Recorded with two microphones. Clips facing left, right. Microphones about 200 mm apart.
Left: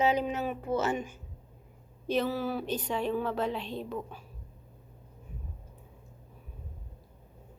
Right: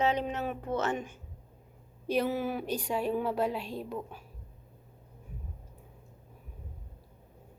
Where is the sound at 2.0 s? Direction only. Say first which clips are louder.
Even; 10° right (ahead or behind).